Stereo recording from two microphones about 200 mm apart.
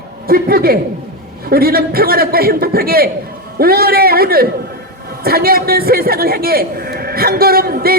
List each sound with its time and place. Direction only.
0.3 s a man's voice: 50° right (ahead or behind)